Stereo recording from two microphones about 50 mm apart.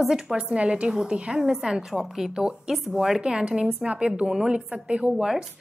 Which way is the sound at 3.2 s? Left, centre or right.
Centre.